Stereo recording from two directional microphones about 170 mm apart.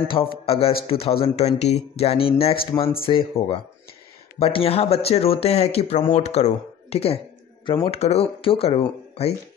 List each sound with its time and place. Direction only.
0.1 s speech: 35° left (ahead or behind)
8.0 s speech: 40° left (ahead or behind)